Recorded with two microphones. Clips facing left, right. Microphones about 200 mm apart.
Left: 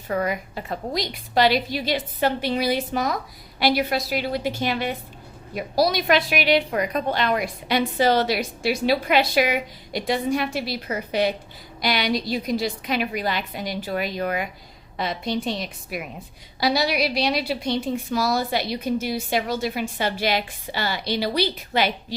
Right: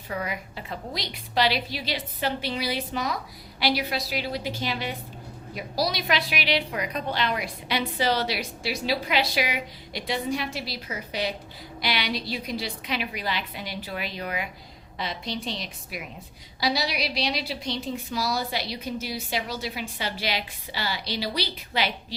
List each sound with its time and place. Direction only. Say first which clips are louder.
0.1 s a woman's voice: left 7 dB; 50° left (ahead or behind)